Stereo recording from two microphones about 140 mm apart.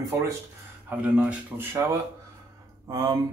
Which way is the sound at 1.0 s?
10° right (ahead or behind).